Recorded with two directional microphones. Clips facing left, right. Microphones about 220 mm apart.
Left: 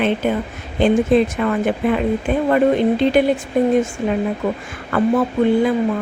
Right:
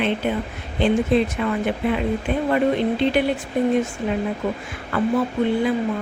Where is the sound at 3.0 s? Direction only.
45° left (ahead or behind).